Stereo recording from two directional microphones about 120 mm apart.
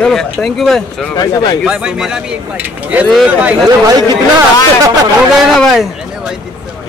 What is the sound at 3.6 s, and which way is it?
Speech, 30° right (ahead or behind).